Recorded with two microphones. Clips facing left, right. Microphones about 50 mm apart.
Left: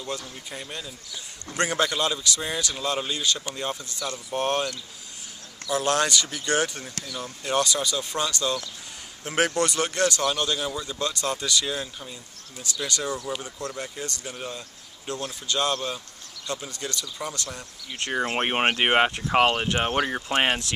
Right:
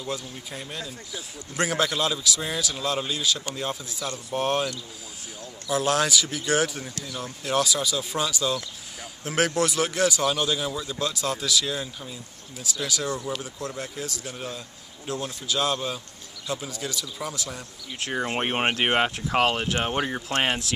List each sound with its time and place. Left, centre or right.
0.0 s speech: centre
18.1 s speech: centre